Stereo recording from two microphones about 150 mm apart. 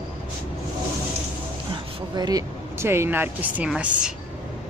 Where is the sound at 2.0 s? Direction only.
25° right (ahead or behind).